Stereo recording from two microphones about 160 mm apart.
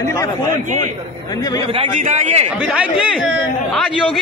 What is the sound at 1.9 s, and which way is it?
Speech, 45° right (ahead or behind).